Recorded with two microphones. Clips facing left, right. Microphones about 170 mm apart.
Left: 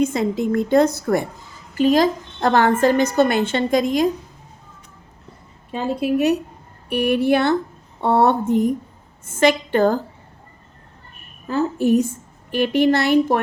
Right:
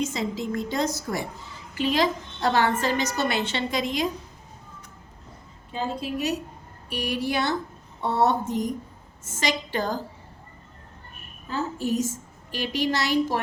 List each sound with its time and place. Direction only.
0.0 s a woman's voice: 55° left (ahead or behind)
1.7 s a woman's voice: 45° left (ahead or behind)
5.7 s a woman's voice: 60° left (ahead or behind)
11.4 s a woman's voice: 60° left (ahead or behind)